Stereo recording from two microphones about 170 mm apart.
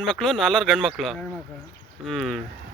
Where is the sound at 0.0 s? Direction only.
Centre (ahead or behind).